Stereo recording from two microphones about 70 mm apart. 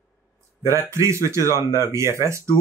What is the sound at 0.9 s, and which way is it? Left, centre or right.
Speech, right.